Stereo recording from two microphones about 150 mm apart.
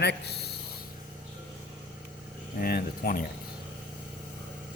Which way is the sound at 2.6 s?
75° left (ahead or behind).